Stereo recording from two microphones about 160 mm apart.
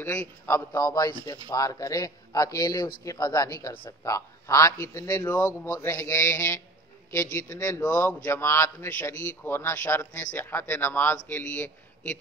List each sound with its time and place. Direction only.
0.0 s speech: 10° left (ahead or behind)